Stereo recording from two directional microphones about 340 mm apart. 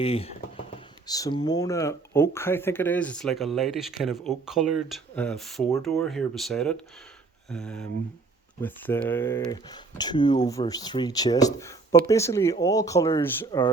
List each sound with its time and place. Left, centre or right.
0.0 s speech: centre